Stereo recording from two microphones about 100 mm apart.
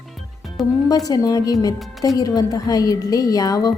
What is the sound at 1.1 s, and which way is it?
Speech, 40° left (ahead or behind).